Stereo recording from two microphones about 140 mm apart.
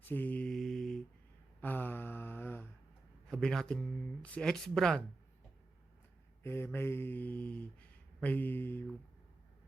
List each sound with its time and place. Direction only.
0.0 s mantra: 15° left (ahead or behind)
1.6 s mantra: 15° left (ahead or behind)
3.2 s speech: 5° left (ahead or behind)
6.4 s speech: 15° left (ahead or behind)
6.7 s mantra: 15° left (ahead or behind)